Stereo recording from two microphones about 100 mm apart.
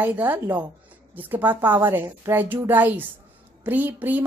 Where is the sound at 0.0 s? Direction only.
20° right (ahead or behind).